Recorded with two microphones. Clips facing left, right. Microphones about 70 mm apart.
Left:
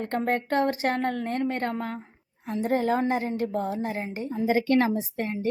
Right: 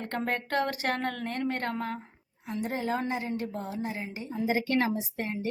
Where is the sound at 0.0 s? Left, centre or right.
Left.